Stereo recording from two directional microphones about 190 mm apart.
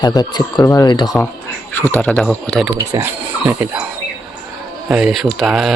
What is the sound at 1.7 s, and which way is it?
Speech, 10° left (ahead or behind).